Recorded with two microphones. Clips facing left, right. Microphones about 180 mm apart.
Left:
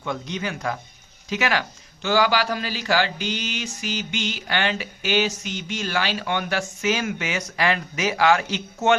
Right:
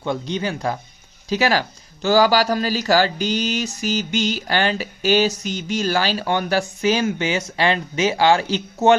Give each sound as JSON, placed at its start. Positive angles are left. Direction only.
{"t": 0.0, "sound": "speech", "side_deg": -30}